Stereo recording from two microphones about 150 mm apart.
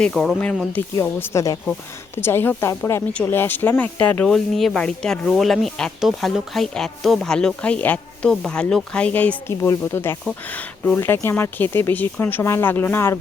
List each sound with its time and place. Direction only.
0.0 s speech: centre (ahead or behind)
1.0 s speech: 20° left (ahead or behind)